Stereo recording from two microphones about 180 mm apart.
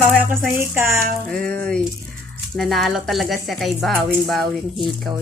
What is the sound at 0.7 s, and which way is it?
Speech, 15° right (ahead or behind).